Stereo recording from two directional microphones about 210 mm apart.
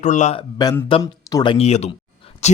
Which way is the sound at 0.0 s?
35° left (ahead or behind).